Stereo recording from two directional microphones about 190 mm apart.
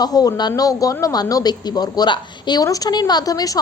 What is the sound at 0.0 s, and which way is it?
Speech, 20° left (ahead or behind).